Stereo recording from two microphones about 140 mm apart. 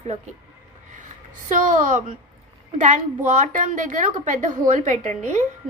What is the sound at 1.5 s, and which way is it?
A woman's voice, 60° right (ahead or behind).